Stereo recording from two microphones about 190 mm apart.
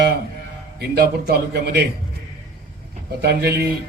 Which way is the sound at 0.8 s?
55° right (ahead or behind).